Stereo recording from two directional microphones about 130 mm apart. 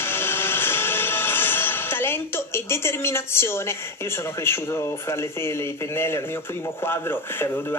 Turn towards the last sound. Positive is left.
turn(degrees=20)  # may be behind; listen again after turning